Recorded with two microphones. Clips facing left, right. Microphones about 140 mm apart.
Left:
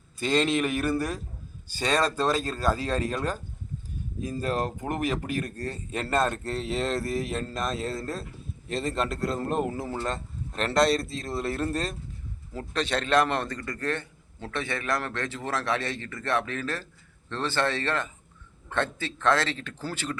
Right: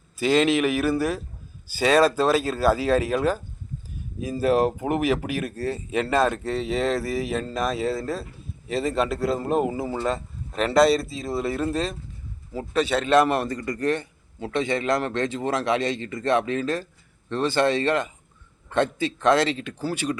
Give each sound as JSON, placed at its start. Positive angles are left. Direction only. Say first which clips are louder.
{"t": 0.2, "sound": "a man's voice", "louder": "right 5 dB", "side_deg": -5}